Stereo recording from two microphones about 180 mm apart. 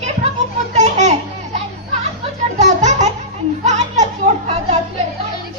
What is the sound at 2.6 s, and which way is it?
Children playing, 40° right (ahead or behind).